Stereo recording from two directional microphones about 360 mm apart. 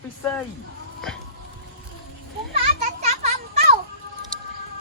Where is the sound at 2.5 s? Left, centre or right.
Centre.